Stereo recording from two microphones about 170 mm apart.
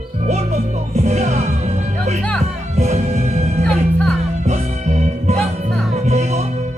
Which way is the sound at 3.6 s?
5° left (ahead or behind).